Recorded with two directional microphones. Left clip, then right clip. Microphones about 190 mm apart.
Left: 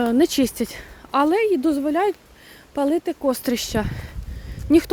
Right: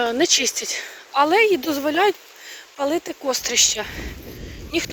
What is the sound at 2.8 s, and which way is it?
Speech, 15° left (ahead or behind).